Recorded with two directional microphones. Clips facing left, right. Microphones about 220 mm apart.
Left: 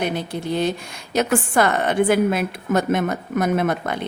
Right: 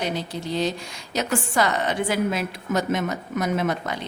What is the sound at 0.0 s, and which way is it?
A woman's voice, 55° left (ahead or behind).